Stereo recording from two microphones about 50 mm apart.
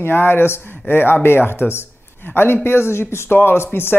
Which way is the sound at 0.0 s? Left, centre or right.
Left.